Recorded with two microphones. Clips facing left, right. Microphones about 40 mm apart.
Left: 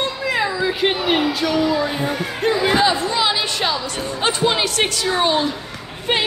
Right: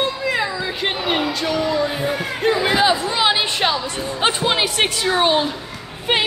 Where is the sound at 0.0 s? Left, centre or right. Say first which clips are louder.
Even; centre; by 3.7 s right.